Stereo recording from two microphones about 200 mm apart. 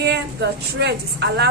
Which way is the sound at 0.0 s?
60° right (ahead or behind).